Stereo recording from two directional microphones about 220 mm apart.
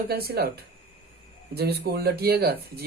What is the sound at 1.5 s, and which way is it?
Speech, 45° right (ahead or behind).